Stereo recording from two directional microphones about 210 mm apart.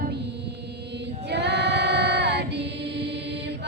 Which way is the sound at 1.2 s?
55° right (ahead or behind).